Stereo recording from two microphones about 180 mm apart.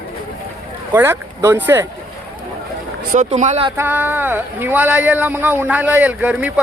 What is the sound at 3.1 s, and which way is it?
Speech, 40° right (ahead or behind).